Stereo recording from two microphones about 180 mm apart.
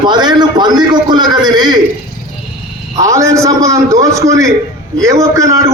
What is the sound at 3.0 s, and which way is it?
A man's voice, 15° right (ahead or behind).